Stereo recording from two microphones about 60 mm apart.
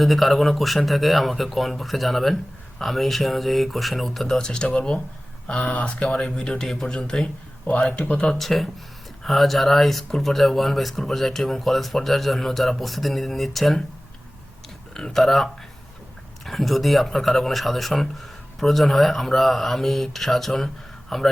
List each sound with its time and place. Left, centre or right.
0.0 s speech: centre
8.3 s speech: centre
14.9 s speech: centre
16.5 s speech: centre